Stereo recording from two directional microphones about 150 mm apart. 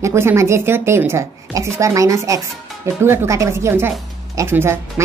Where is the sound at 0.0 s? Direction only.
15° right (ahead or behind).